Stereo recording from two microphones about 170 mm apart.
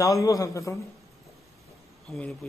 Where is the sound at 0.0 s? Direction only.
20° left (ahead or behind).